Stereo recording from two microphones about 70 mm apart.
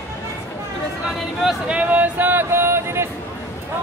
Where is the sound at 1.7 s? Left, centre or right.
Right.